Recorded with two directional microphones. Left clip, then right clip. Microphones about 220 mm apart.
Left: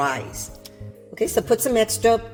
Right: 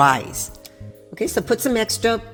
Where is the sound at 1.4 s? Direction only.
30° right (ahead or behind).